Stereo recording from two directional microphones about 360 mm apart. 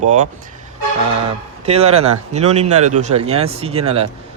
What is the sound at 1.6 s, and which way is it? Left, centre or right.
Speech, centre.